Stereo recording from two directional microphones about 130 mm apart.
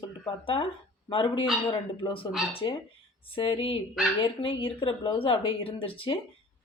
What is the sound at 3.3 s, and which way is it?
Speech, 40° left (ahead or behind).